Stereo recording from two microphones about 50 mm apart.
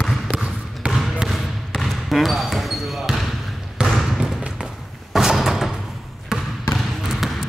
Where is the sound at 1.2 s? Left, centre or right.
Centre.